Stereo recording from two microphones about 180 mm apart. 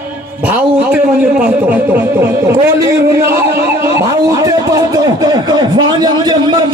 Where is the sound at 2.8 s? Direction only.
15° right (ahead or behind).